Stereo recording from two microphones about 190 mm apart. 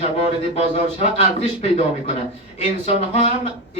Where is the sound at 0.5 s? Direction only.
35° left (ahead or behind).